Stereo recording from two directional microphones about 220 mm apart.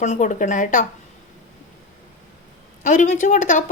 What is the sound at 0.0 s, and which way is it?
Speech, 35° left (ahead or behind).